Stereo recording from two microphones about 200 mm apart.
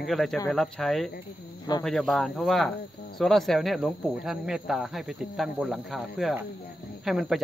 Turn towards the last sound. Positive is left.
turn(degrees=0)  # may be behind; listen again after turning